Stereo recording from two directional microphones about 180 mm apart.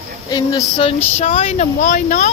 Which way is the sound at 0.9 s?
35° left (ahead or behind).